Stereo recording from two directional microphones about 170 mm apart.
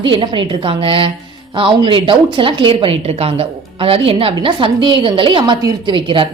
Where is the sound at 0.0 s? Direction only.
30° right (ahead or behind).